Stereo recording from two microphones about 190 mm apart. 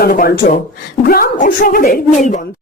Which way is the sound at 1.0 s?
50° left (ahead or behind).